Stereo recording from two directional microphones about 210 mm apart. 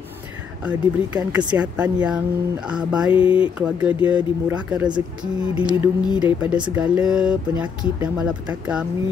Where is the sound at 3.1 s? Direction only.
25° left (ahead or behind).